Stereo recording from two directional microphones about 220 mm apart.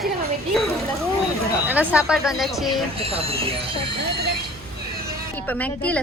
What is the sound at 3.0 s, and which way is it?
Speech, 25° right (ahead or behind).